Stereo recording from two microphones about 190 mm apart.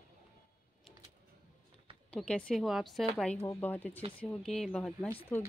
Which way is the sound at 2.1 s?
5° left (ahead or behind).